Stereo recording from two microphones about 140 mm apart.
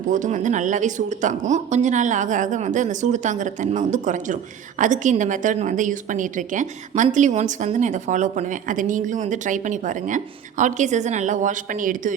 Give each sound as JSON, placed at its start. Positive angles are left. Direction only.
{"t": 0.1, "sound": "a woman's voice", "side_deg": -65}